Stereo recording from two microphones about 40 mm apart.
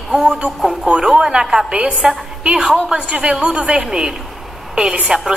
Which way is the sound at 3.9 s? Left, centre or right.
Centre.